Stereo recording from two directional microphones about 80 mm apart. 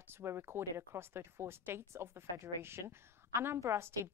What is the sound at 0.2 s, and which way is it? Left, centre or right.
A woman's voice, right.